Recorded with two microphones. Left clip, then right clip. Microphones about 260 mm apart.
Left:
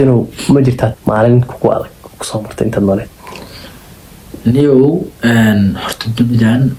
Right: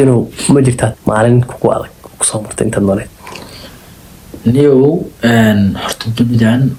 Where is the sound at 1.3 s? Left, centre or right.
Right.